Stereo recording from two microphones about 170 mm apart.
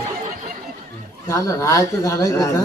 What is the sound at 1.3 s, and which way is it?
A man's voice, 20° left (ahead or behind).